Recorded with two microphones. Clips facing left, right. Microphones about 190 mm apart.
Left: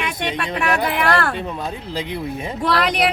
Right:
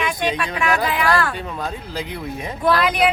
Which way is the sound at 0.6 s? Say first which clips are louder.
Left 2 dB; 65° left (ahead or behind).